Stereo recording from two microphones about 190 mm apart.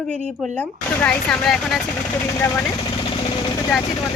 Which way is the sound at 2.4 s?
15° left (ahead or behind).